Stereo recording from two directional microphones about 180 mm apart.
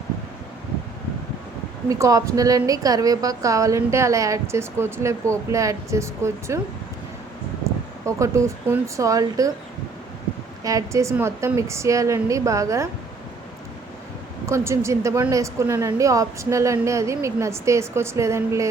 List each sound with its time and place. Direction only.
1.9 s a woman's voice: 20° right (ahead or behind)
8.0 s a woman's voice: 15° right (ahead or behind)
10.6 s a woman's voice: 20° right (ahead or behind)
14.4 s a woman's voice: 15° right (ahead or behind)